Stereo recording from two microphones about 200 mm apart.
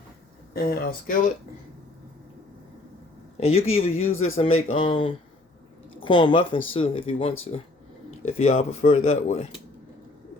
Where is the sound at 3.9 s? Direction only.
90° left.